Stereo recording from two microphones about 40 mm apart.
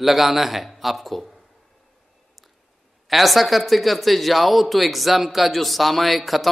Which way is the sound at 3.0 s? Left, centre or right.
Centre.